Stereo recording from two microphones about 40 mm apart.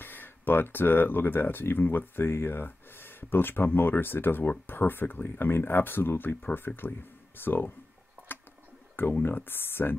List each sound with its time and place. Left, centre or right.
0.0 s speech: left
9.2 s speech: left